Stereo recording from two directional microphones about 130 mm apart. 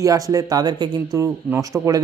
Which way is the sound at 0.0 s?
25° right (ahead or behind).